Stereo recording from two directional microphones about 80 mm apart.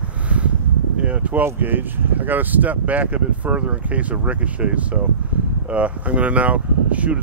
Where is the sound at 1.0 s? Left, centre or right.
Centre.